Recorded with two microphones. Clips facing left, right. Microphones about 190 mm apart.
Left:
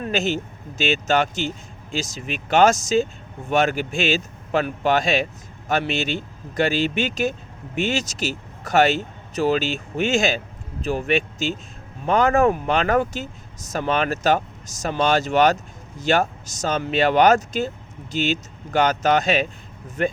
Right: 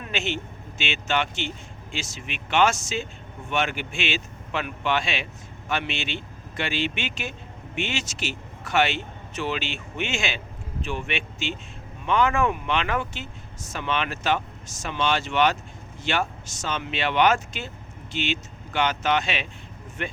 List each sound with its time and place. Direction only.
0.0 s speech: 40° left (ahead or behind)